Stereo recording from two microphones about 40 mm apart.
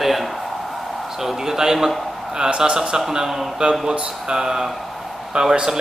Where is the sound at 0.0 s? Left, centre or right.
Centre.